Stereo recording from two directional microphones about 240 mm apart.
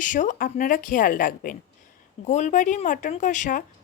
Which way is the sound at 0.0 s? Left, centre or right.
Left.